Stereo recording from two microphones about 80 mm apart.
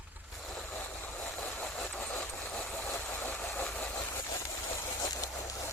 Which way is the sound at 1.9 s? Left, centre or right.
Left.